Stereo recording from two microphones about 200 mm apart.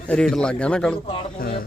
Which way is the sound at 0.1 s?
5° left (ahead or behind).